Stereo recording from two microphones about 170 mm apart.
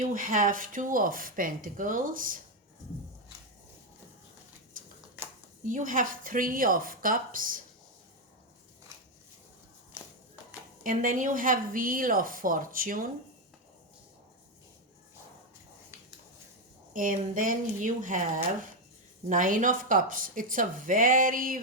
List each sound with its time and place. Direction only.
0.1 s speech: 50° right (ahead or behind)
5.6 s speech: 50° right (ahead or behind)
10.8 s speech: 50° right (ahead or behind)
16.9 s speech: 50° right (ahead or behind)
19.3 s speech: 50° right (ahead or behind)